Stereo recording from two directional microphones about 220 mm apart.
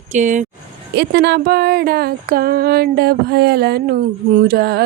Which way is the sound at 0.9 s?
50° right (ahead or behind).